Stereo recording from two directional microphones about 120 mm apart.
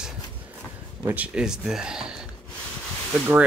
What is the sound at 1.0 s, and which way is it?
Speech, 20° right (ahead or behind).